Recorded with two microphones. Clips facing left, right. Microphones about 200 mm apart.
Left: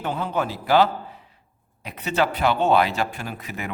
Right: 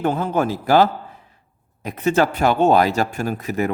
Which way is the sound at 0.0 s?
50° right (ahead or behind).